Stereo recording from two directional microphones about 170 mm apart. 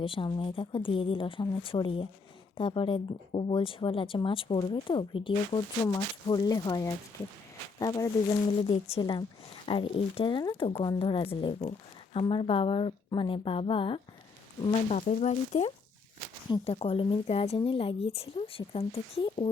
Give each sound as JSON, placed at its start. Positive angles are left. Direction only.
{"t": 0.0, "sound": "speech", "side_deg": 30}
{"t": 8.6, "sound": "speech", "side_deg": 35}
{"t": 14.7, "sound": "speech", "side_deg": 45}